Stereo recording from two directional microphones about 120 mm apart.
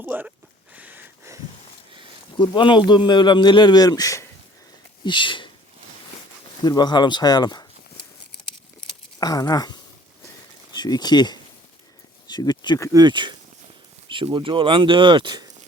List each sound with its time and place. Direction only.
0.0 s a sound: 15° right (ahead or behind)
2.4 s speech: 40° left (ahead or behind)
5.0 s speech: 40° left (ahead or behind)
6.7 s speech: 35° left (ahead or behind)
9.2 s speech: 30° left (ahead or behind)
10.8 s speech: 35° left (ahead or behind)
12.9 s speech: 35° right (ahead or behind)